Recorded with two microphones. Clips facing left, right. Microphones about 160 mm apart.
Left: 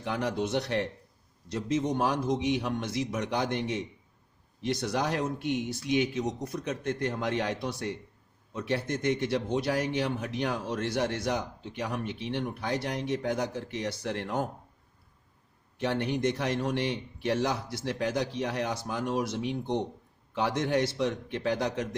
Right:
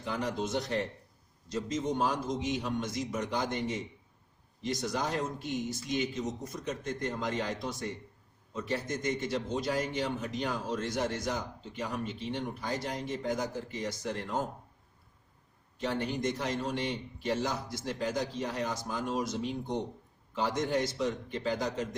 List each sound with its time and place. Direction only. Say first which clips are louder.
0.0 s a man's voice: left 3 dB; 65° left (ahead or behind)
15.8 s a man's voice: left 4 dB; 65° left (ahead or behind)